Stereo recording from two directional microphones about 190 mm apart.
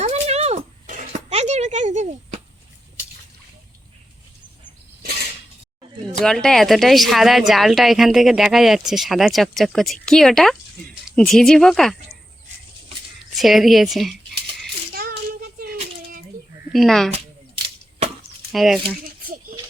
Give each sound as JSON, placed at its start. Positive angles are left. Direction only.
{"t": 0.0, "sound": "a sound", "side_deg": -35}
{"t": 6.1, "sound": "a woman's voice", "side_deg": 5}
{"t": 13.3, "sound": "a woman's voice", "side_deg": 0}
{"t": 14.9, "sound": "child singing", "side_deg": -50}
{"t": 16.7, "sound": "a woman's voice", "side_deg": 0}
{"t": 18.5, "sound": "a woman's voice", "side_deg": 0}
{"t": 19.2, "sound": "a sound", "side_deg": -50}